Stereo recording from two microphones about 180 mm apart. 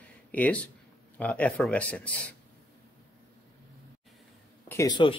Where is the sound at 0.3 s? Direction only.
10° left (ahead or behind).